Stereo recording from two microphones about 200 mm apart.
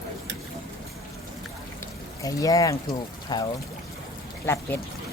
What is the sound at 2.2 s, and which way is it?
Speech, 15° left (ahead or behind).